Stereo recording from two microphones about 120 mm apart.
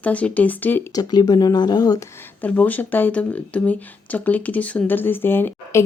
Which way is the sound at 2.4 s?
15° left (ahead or behind).